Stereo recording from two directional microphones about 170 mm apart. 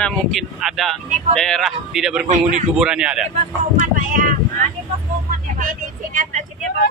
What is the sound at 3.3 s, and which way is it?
Vehicle, 50° right (ahead or behind).